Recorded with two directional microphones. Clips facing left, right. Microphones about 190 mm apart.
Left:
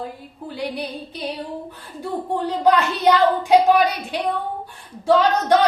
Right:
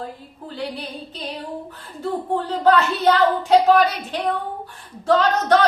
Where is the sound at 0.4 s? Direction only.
15° left (ahead or behind).